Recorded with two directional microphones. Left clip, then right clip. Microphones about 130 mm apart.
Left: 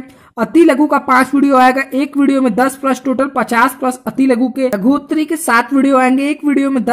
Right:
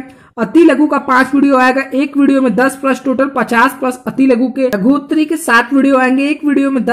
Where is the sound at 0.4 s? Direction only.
40° left (ahead or behind).